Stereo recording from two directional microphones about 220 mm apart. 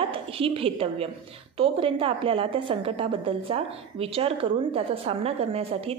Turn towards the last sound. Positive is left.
turn(degrees=-25)  # may be behind; listen again after turning